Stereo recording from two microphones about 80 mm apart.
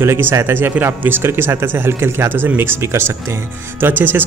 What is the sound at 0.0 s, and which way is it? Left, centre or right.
Speech, right.